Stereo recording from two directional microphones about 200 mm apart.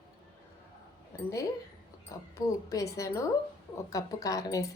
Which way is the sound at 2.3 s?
15° left (ahead or behind).